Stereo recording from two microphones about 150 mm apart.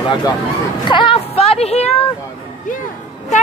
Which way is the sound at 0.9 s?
35° left (ahead or behind).